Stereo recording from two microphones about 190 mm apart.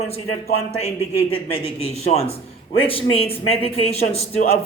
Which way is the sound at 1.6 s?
35° left (ahead or behind).